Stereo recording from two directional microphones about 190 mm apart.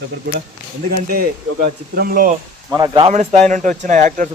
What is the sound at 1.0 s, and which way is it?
Speech, 55° right (ahead or behind).